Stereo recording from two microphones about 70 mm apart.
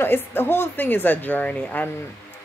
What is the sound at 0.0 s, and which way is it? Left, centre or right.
A woman's voice, left.